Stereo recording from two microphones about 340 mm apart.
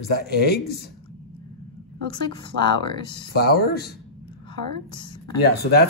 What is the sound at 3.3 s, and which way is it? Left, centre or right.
Speech, left.